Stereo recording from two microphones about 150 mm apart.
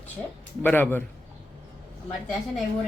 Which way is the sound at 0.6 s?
15° left (ahead or behind).